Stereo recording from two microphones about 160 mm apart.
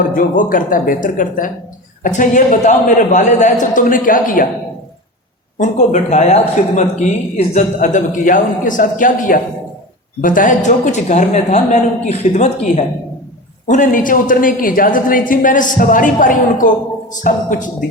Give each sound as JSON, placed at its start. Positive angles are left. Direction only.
{"t": 0.1, "sound": "a woman's voice", "side_deg": 60}
{"t": 5.5, "sound": "speech", "side_deg": 50}
{"t": 13.7, "sound": "a woman's voice", "side_deg": 55}